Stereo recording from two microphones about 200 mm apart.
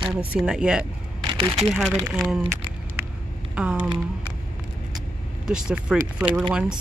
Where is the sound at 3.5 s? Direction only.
5° right (ahead or behind).